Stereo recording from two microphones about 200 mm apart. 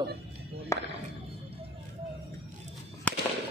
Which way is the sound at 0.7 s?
15° left (ahead or behind).